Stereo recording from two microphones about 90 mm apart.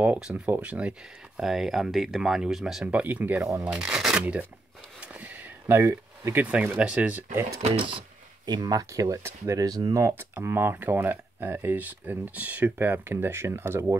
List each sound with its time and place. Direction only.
0.5 s speech: 15° right (ahead or behind)
5.0 s a sound: 15° right (ahead or behind)
5.8 s speech: 30° right (ahead or behind)
6.4 s speech: 15° right (ahead or behind)
7.7 s speech: 90° right
8.5 s speech: 45° right (ahead or behind)
9.9 s speech: 35° right (ahead or behind)